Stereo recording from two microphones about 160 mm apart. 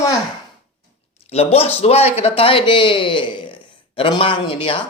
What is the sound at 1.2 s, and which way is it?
A man's voice, 40° left (ahead or behind).